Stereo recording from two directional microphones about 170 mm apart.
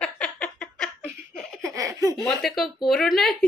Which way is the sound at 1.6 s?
20° right (ahead or behind).